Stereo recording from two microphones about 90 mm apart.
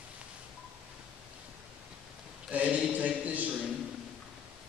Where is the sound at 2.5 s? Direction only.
15° right (ahead or behind).